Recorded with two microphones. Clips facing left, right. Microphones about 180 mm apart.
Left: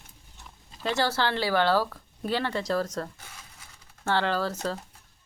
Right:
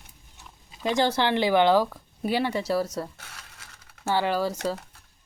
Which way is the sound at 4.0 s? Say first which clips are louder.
Right 2 dB; 10° right (ahead or behind).